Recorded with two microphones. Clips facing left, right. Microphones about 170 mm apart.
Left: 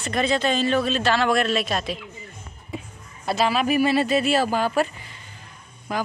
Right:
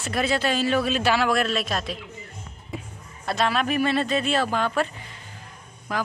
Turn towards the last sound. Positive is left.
turn(degrees=0)  # may be behind; listen again after turning